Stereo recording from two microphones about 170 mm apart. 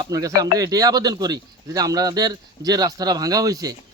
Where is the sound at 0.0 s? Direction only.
20° right (ahead or behind).